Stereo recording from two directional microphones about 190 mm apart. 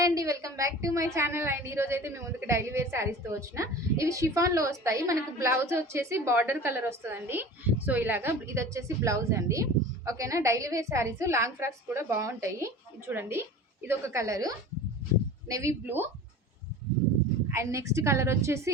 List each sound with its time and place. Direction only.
0.0 s a woman's voice: 15° right (ahead or behind)
17.5 s a woman's voice: 15° right (ahead or behind)